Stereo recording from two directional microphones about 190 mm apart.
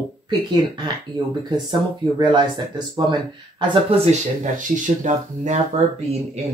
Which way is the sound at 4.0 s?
40° right (ahead or behind).